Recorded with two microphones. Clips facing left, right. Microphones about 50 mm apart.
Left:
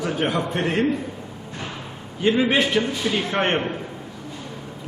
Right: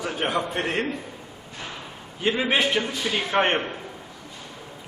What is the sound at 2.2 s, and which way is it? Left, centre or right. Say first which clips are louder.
A man's voice: left 3 dB; centre.